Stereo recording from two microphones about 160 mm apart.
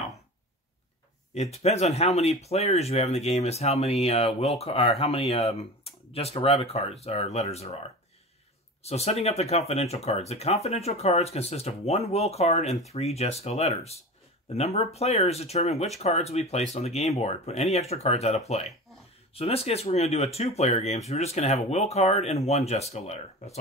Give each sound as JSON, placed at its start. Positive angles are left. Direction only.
{"t": 1.3, "sound": "speech", "side_deg": 40}
{"t": 8.8, "sound": "speech", "side_deg": 40}